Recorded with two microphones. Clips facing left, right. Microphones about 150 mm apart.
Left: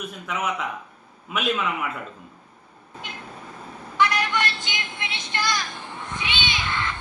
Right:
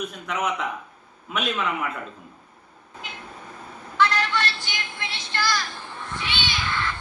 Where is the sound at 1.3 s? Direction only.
5° left (ahead or behind).